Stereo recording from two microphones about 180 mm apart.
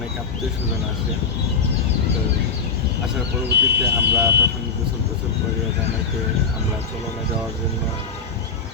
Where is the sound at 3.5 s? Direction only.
65° right (ahead or behind).